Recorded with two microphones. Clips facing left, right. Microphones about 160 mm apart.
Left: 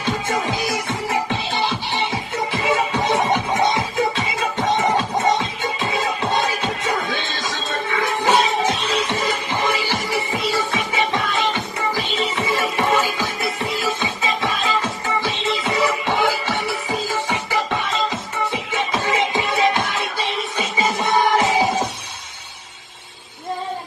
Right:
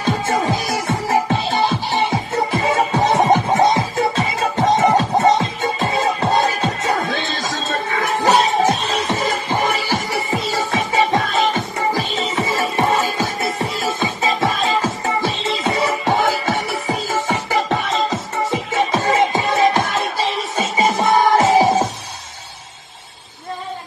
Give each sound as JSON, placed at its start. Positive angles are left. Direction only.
{"t": 0.3, "sound": "music", "side_deg": -40}